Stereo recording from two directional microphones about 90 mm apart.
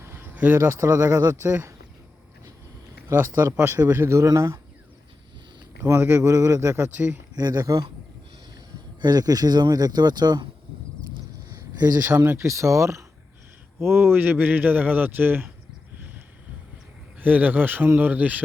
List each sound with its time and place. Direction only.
0.0 s speech: 25° right (ahead or behind)
3.1 s speech: 30° right (ahead or behind)
5.8 s a man's voice: 25° right (ahead or behind)
7.3 s speech: 45° right (ahead or behind)
9.0 s speech: 50° right (ahead or behind)
11.8 s speech: 45° right (ahead or behind)
12.1 s a man's voice: 20° right (ahead or behind)
12.4 s a man's voice: 35° right (ahead or behind)
17.2 s a man's voice: 20° right (ahead or behind)